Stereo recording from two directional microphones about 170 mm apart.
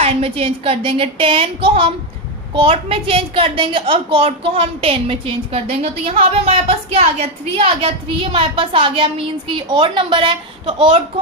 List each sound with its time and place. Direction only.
0.0 s a woman's voice: 35° right (ahead or behind)